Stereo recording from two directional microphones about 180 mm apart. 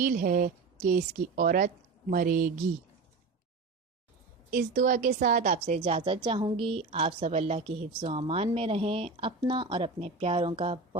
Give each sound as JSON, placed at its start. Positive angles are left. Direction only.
{"t": 0.0, "sound": "a woman's voice", "side_deg": -50}
{"t": 4.5, "sound": "a woman's voice", "side_deg": -45}